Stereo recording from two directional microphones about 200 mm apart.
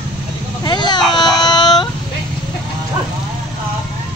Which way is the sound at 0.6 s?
20° left (ahead or behind).